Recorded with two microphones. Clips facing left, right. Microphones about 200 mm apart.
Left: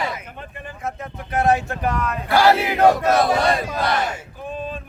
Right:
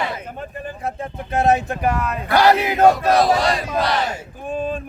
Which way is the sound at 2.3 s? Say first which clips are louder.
Right 1 dB; 20° right (ahead or behind).